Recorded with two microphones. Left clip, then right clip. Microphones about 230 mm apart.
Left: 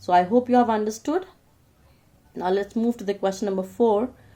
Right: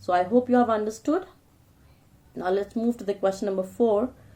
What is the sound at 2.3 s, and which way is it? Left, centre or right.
Speech, left.